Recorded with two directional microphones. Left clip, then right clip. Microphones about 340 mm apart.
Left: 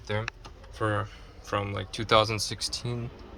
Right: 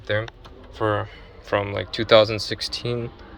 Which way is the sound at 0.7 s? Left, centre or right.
Centre.